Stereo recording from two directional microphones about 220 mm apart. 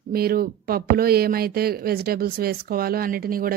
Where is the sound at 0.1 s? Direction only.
45° right (ahead or behind).